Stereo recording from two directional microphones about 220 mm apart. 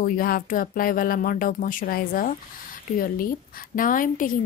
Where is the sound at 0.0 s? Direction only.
40° left (ahead or behind).